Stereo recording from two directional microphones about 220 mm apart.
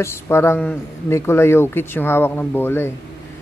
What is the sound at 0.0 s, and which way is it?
Speech, 10° left (ahead or behind).